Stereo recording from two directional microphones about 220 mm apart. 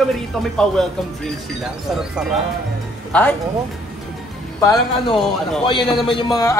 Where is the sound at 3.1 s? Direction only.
5° left (ahead or behind).